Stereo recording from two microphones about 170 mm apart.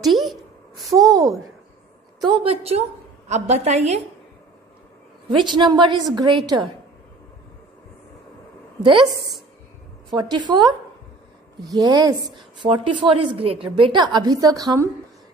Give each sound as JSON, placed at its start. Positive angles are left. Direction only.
{"t": 0.0, "sound": "a sound", "side_deg": 0}
{"t": 2.1, "sound": "a woman's voice", "side_deg": -30}
{"t": 5.3, "sound": "a woman's voice", "side_deg": -25}
{"t": 10.0, "sound": "a woman's voice", "side_deg": -25}